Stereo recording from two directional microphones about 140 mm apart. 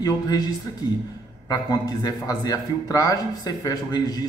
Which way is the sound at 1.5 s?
25° left (ahead or behind).